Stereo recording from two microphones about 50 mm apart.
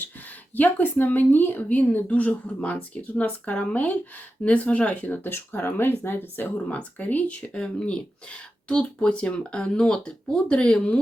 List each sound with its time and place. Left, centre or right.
0.5 s speech: left
5.2 s speech: left
6.7 s speech: left